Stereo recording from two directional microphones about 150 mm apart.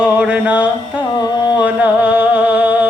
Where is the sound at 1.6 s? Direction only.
10° right (ahead or behind).